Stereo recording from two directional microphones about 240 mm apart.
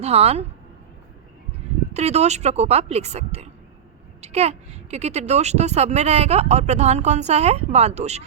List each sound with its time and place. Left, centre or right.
0.0 s a woman's voice: right
1.9 s a woman's voice: right